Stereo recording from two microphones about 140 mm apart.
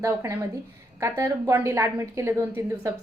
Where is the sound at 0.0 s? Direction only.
20° right (ahead or behind).